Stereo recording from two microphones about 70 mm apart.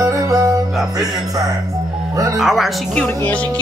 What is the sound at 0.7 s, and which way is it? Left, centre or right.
Music, centre.